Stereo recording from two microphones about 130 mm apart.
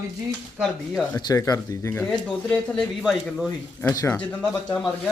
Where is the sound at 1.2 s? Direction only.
30° left (ahead or behind).